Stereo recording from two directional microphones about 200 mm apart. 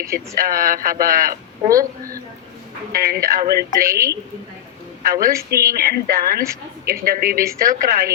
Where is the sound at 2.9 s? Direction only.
50° right (ahead or behind).